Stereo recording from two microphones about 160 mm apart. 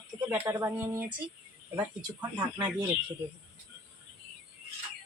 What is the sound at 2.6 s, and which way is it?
Speech, 10° right (ahead or behind).